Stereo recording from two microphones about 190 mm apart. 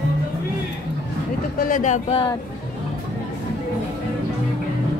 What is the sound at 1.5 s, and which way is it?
Speech, 45° left (ahead or behind).